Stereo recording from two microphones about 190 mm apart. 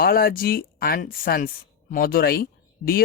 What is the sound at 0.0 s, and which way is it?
Speech, 50° left (ahead or behind).